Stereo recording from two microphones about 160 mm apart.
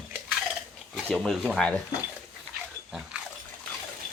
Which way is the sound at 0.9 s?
Centre (ahead or behind).